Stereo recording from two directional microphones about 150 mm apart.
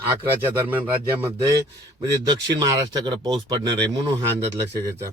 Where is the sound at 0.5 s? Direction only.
15° right (ahead or behind).